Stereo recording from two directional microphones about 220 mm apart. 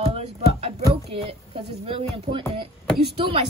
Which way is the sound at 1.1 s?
25° right (ahead or behind).